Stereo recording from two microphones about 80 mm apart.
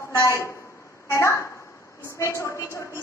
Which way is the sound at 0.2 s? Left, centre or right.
Left.